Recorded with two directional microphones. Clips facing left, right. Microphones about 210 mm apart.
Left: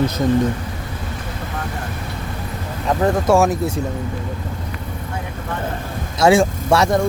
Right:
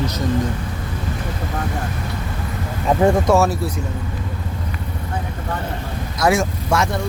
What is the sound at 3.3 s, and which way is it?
Speech, 15° left (ahead or behind).